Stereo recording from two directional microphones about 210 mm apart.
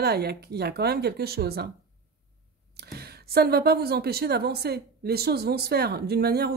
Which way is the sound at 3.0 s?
50° right (ahead or behind).